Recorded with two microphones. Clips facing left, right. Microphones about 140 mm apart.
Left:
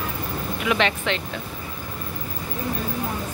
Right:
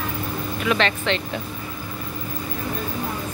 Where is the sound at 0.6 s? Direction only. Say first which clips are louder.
Right 1 dB; 15° left (ahead or behind).